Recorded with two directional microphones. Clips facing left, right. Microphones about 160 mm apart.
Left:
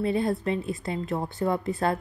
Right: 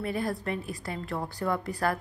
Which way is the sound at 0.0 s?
25° left (ahead or behind).